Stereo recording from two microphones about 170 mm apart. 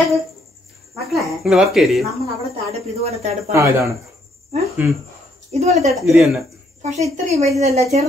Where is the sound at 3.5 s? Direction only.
15° right (ahead or behind).